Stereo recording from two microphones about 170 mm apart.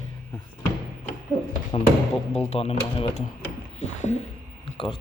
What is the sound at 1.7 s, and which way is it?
Speech, 30° left (ahead or behind).